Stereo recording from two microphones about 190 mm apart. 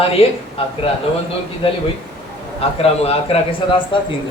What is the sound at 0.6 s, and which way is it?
Speech, 30° left (ahead or behind).